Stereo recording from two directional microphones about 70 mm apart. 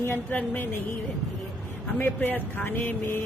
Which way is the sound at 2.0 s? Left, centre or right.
Left.